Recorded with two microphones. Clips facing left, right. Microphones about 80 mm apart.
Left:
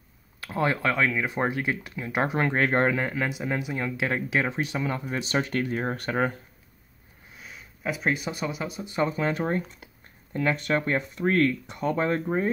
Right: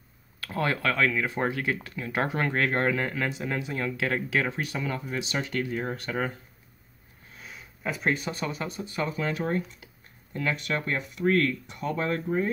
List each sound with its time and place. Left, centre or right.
0.4 s speech: centre
5.2 s speech: left
7.3 s speech: centre
8.8 s speech: left